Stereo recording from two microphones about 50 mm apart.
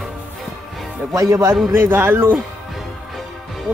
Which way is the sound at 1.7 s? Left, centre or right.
Right.